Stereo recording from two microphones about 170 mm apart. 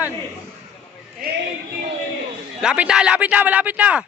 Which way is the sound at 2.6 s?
5° right (ahead or behind).